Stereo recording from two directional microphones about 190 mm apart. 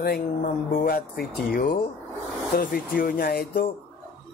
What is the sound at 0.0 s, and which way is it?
Speech, 50° left (ahead or behind).